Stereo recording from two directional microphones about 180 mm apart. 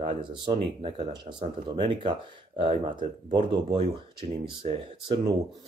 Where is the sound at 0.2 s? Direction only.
30° right (ahead or behind).